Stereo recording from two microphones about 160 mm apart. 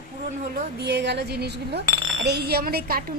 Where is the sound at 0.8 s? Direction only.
90° right.